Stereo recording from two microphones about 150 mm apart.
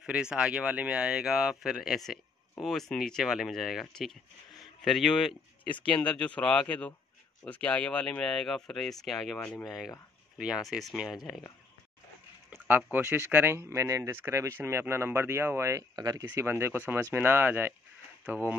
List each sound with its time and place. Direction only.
0.0 s speech: 5° right (ahead or behind)
9.7 s speech: centre (ahead or behind)
12.4 s speech: 10° right (ahead or behind)